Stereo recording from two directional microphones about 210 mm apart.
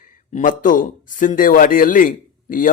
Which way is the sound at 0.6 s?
40° left (ahead or behind).